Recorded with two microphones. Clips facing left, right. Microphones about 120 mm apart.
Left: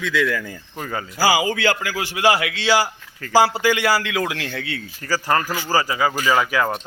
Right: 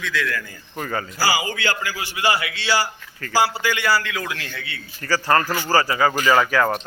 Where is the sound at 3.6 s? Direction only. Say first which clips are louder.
Left 3 dB; 90° left.